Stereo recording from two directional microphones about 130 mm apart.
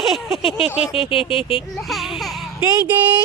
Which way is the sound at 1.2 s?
45° left (ahead or behind).